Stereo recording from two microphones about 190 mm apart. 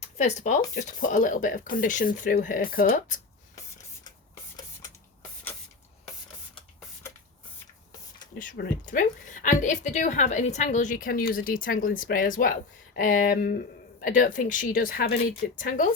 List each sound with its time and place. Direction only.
0.0 s a woman's voice: 40° left (ahead or behind)
8.4 s a woman's voice: 50° left (ahead or behind)